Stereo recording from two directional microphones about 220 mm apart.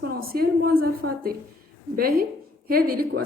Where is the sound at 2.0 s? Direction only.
45° right (ahead or behind).